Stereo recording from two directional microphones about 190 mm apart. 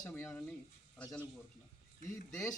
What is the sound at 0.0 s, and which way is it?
Speech, 5° left (ahead or behind).